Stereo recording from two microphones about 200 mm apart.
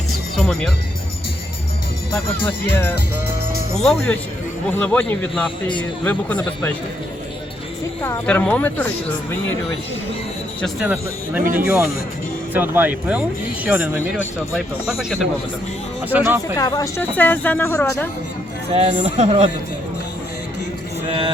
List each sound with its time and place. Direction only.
0.3 s music: 5° left (ahead or behind)
2.4 s speech: 10° left (ahead or behind)
8.0 s speech: 10° left (ahead or behind)
10.8 s speech: 10° right (ahead or behind)
16.6 s speech: 15° left (ahead or behind)
18.7 s speech: 30° right (ahead or behind)